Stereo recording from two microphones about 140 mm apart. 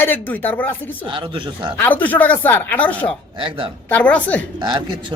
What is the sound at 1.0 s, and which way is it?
Speech, 35° right (ahead or behind).